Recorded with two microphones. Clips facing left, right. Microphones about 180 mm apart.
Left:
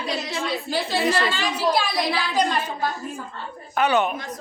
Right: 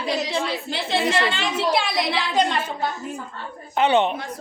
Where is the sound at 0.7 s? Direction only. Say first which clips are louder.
Even; 25° right (ahead or behind).